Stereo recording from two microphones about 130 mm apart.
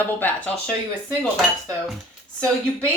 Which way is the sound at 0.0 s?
15° left (ahead or behind).